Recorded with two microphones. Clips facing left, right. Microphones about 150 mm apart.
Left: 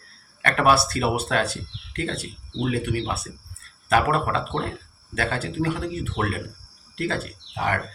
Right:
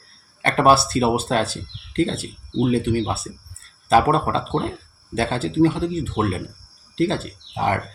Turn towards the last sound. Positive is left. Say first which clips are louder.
# right 4 dB
turn(degrees=-25)  # may be behind; listen again after turning